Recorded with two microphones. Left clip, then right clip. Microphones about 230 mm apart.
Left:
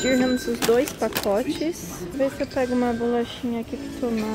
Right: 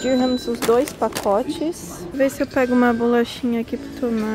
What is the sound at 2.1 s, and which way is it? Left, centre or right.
Speech, right.